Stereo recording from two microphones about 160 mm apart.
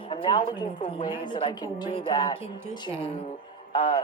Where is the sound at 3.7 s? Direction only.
45° left (ahead or behind).